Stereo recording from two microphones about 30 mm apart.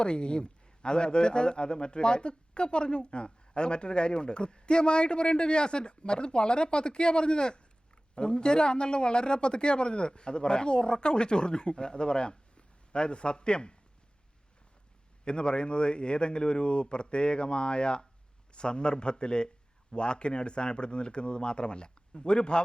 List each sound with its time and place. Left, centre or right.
0.0 s a man's voice: left
15.2 s a man's voice: left